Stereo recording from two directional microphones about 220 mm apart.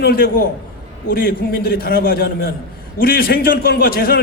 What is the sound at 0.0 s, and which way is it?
A man's voice, 45° left (ahead or behind).